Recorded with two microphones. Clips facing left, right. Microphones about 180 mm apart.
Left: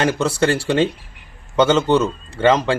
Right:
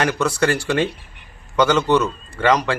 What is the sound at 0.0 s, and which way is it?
Speech, 30° left (ahead or behind).